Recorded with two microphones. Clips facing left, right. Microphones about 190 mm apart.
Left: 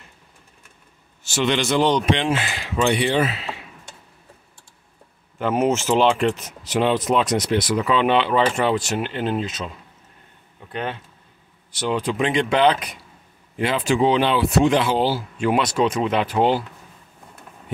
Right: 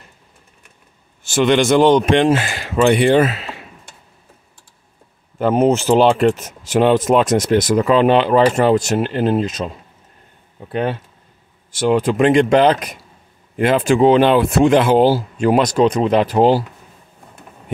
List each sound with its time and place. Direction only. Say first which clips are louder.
1.2 s speech: right 7 dB; 50° right (ahead or behind)
5.4 s speech: right 6 dB; 35° right (ahead or behind)
10.7 s speech: right 8 dB; 40° right (ahead or behind)